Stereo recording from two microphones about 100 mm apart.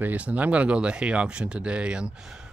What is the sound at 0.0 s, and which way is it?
Speech, 15° right (ahead or behind).